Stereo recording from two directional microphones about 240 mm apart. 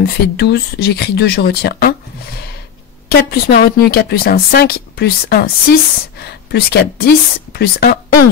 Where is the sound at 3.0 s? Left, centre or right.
Left.